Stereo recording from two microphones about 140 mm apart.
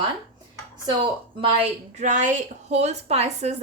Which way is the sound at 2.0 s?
60° right (ahead or behind).